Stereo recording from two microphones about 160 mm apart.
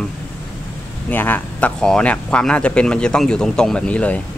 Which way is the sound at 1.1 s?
10° left (ahead or behind).